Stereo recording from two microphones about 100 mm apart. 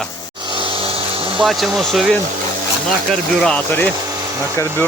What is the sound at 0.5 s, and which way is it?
Vehicle, 60° right (ahead or behind).